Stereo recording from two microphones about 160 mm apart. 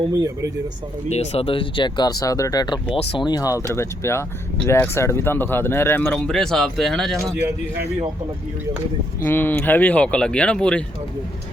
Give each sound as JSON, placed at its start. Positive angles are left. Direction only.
{"t": 1.1, "sound": "speech", "side_deg": 40}
{"t": 9.2, "sound": "speech", "side_deg": 10}